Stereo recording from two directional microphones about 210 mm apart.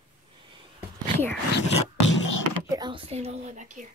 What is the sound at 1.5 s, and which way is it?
Music, 60° left (ahead or behind).